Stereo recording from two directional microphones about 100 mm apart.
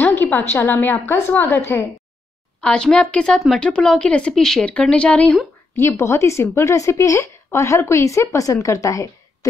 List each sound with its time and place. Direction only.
0.0 s a woman's voice: 20° left (ahead or behind)
2.6 s speech: 10° left (ahead or behind)
5.8 s a woman's voice: 25° left (ahead or behind)